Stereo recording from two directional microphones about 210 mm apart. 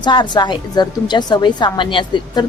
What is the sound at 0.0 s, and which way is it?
A woman's voice, 20° left (ahead or behind).